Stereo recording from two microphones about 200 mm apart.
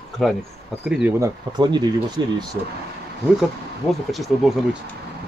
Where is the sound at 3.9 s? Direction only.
Centre (ahead or behind).